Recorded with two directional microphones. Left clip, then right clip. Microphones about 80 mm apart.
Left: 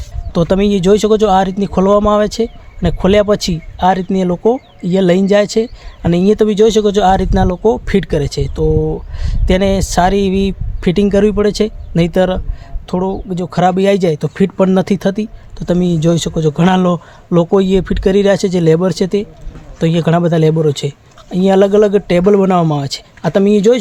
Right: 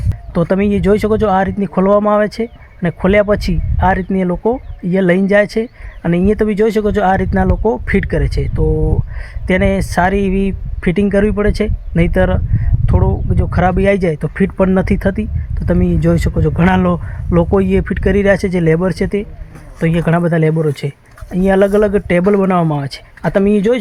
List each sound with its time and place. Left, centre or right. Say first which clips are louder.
0.3 s speech: left 2 dB; left
7.9 s speech: left 2 dB; left
8.7 s speech: left 4 dB; centre
9.2 s speech: left 1 dB; left
19.8 s speech: left 2 dB; left